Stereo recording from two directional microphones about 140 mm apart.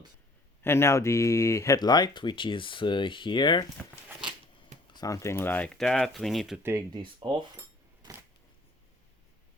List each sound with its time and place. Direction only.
0.6 s speech: 20° left (ahead or behind); by 3.7 s 35° left (ahead or behind)
4.9 s speech: 25° left (ahead or behind); by 6.6 s centre (ahead or behind)
6.6 s speech: 20° right (ahead or behind)
6.9 s speech: 35° right (ahead or behind)